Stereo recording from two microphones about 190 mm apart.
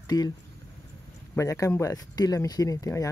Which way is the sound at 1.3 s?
15° left (ahead or behind).